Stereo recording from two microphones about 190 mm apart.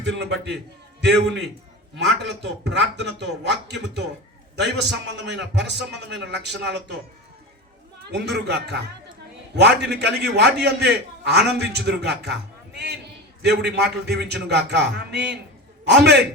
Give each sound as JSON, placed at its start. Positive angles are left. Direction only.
{"t": 0.0, "sound": "a man's voice", "side_deg": -60}
{"t": 2.0, "sound": "a man's voice", "side_deg": -65}
{"t": 8.1, "sound": "a man's voice", "side_deg": -60}